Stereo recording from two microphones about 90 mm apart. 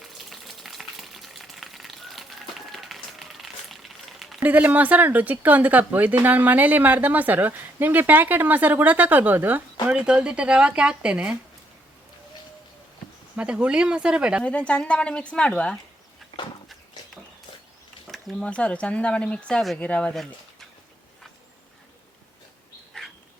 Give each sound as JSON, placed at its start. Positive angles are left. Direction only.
{"t": 0.0, "sound": "typewriter", "side_deg": 0}
{"t": 4.4, "sound": "speech", "side_deg": -20}
{"t": 9.8, "sound": "speech", "side_deg": -10}
{"t": 13.3, "sound": "speech", "side_deg": -15}
{"t": 14.4, "sound": "speech", "side_deg": 10}
{"t": 18.1, "sound": "a sound", "side_deg": 0}
{"t": 18.4, "sound": "speech", "side_deg": 15}
{"t": 22.9, "sound": "bird", "side_deg": 10}